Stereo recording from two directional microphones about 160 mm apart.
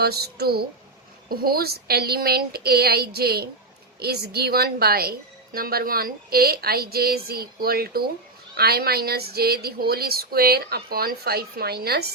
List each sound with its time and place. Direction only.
0.0 s a woman's voice: 80° right